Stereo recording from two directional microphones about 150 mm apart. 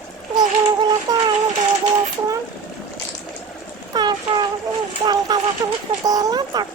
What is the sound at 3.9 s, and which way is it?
Child singing, 30° right (ahead or behind).